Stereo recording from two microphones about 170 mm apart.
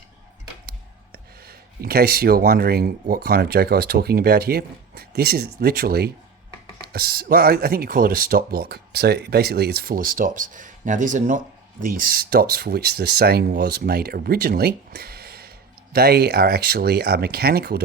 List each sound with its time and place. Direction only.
1.1 s speech: 65° right (ahead or behind)